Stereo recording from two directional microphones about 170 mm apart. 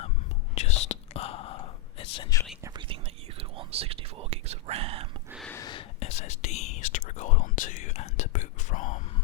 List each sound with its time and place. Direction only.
0.5 s whispering: 40° left (ahead or behind)
2.6 s whispering: 30° right (ahead or behind)
5.5 s a sound: 15° left (ahead or behind)
5.7 s whispering: 40° left (ahead or behind)